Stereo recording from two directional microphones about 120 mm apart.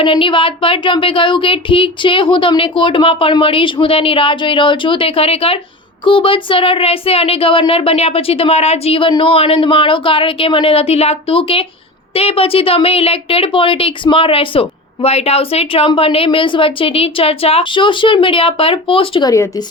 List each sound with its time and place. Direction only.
0.0 s speech: 45° left (ahead or behind)
19.3 s a woman's voice: 25° left (ahead or behind)